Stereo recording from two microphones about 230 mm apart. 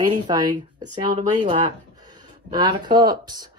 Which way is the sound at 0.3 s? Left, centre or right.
Centre.